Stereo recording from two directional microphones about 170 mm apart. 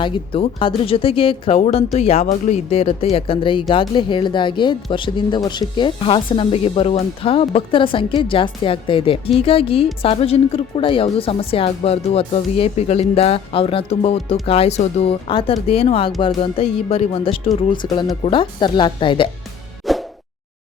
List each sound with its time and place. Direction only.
0.0 s speech: 30° left (ahead or behind)
19.9 s music: centre (ahead or behind)